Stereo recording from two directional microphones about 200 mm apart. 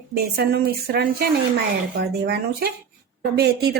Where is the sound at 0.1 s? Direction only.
50° right (ahead or behind).